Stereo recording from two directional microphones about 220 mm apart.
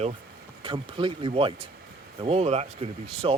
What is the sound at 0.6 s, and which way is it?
Speech, 25° right (ahead or behind).